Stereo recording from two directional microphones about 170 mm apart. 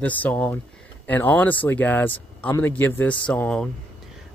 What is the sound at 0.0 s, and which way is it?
Speech, 10° left (ahead or behind).